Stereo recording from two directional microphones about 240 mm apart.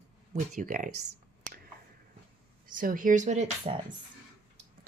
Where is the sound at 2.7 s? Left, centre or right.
Right.